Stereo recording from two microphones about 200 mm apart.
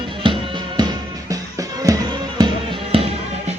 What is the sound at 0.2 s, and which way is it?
Music, 25° right (ahead or behind).